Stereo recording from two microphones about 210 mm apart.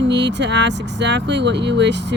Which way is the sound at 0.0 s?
55° right (ahead or behind).